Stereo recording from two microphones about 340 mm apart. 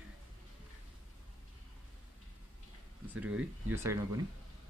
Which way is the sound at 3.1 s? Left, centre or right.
Centre.